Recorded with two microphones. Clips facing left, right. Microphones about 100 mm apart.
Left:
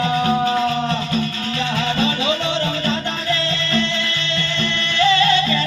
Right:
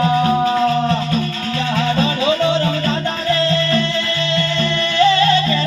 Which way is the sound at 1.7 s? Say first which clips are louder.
Right 3 dB; 40° right (ahead or behind).